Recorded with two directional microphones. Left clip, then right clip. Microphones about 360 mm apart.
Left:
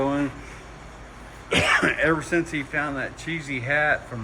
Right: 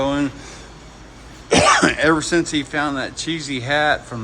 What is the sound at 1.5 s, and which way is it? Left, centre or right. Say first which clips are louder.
Speech: right 6 dB; centre.